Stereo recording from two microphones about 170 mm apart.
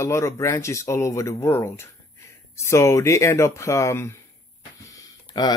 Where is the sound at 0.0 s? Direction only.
15° left (ahead or behind).